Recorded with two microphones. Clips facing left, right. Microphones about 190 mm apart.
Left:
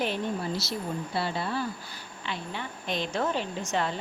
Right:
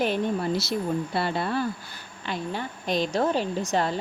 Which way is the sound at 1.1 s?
55° right (ahead or behind).